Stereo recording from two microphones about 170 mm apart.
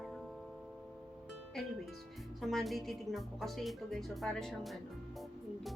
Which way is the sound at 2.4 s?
Centre (ahead or behind).